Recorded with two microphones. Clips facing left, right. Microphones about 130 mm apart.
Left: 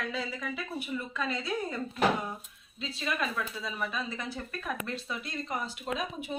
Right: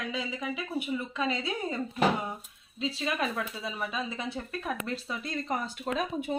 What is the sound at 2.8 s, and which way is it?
Speech, 30° right (ahead or behind).